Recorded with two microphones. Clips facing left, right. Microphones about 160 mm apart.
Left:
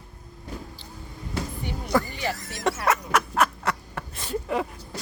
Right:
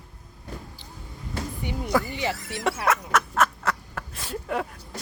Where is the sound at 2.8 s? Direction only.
Centre (ahead or behind).